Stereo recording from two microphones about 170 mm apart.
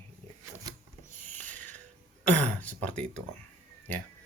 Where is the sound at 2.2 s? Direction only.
10° left (ahead or behind).